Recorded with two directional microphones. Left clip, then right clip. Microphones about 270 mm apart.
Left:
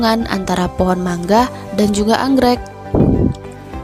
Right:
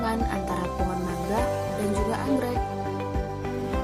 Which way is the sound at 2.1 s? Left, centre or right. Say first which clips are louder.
Left 14 dB; right.